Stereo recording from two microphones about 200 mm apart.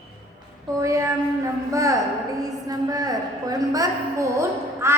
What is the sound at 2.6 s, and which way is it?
A woman's voice, 20° right (ahead or behind).